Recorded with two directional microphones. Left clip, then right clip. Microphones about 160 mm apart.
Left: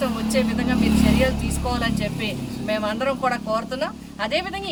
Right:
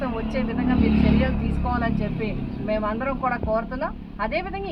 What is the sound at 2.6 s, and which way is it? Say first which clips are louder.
Speech: left 2 dB; 40° left (ahead or behind).